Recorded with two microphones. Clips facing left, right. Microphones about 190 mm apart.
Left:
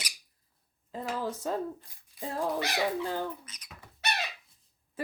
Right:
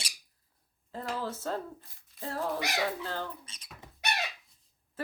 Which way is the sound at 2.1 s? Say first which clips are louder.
Left 2 dB; 15° left (ahead or behind).